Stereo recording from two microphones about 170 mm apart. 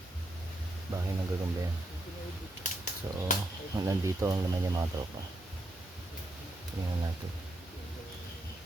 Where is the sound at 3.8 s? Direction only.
20° right (ahead or behind).